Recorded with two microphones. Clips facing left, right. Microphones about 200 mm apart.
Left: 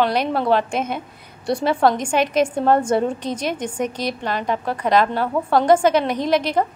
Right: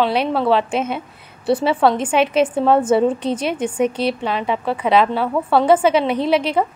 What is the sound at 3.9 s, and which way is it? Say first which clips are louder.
Speech: right 5 dB; 30° right (ahead or behind).